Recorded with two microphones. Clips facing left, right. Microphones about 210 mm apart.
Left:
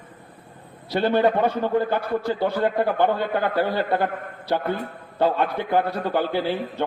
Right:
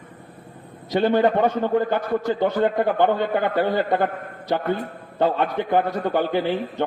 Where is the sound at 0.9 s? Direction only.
15° right (ahead or behind).